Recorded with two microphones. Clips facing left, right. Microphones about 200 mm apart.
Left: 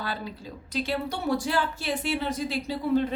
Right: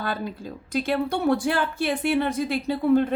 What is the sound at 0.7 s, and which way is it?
A woman's voice, 50° right (ahead or behind).